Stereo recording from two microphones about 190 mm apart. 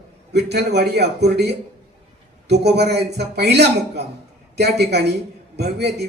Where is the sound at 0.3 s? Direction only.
60° right (ahead or behind).